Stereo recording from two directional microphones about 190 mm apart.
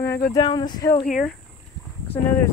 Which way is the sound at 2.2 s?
10° left (ahead or behind).